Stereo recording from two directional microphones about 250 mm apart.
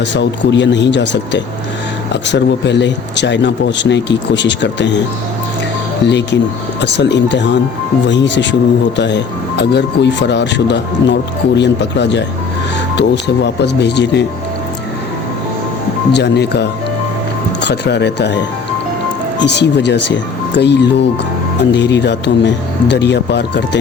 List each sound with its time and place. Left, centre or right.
0.0 s speech: left
2.2 s speech: left
6.1 s speech: left
16.1 s speech: left
19.5 s speech: left